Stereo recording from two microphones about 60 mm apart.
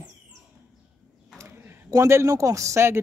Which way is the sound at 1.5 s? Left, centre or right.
Right.